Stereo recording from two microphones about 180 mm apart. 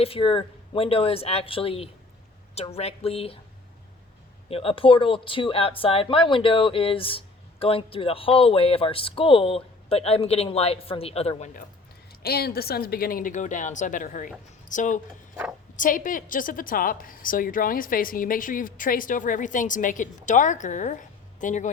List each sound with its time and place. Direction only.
0.0 s speech: 30° left (ahead or behind)
4.4 s speech: 30° left (ahead or behind)
12.2 s a woman's voice: 60° left (ahead or behind); by 21.7 s 45° left (ahead or behind)